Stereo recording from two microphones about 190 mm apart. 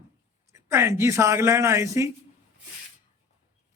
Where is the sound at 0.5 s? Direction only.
15° right (ahead or behind).